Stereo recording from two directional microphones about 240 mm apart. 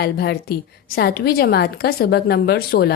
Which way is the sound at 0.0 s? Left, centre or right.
Left.